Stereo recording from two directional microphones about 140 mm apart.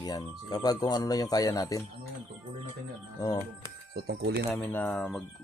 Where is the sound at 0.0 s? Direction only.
25° left (ahead or behind).